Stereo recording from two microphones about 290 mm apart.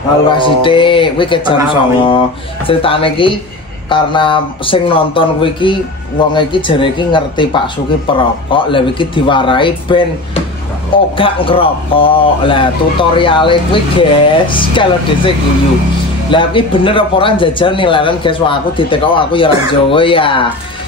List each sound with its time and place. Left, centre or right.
0.3 s speech: centre